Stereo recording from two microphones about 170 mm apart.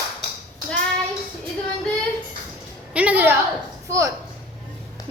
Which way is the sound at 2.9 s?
10° right (ahead or behind).